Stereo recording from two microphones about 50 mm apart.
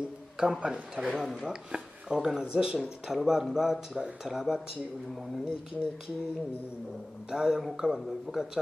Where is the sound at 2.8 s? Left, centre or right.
Centre.